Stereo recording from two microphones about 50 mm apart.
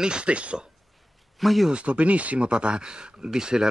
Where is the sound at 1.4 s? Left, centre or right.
Centre.